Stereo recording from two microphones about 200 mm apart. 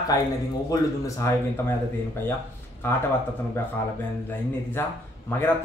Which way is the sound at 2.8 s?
10° left (ahead or behind).